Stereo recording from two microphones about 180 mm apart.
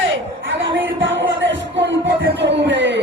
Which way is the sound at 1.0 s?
90° right.